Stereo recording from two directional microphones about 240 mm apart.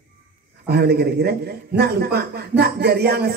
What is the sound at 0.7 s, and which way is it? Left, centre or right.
A man's voice, right.